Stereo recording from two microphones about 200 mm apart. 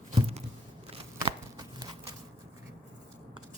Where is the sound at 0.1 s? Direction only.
30° right (ahead or behind).